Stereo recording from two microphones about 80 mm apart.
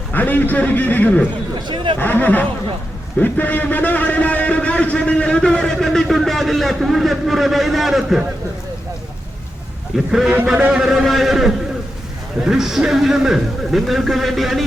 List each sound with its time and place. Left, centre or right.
0.1 s a man's voice: left
1.6 s speech: right
2.0 s a man's voice: left; by 8.2 s centre
10.1 s a man's voice: centre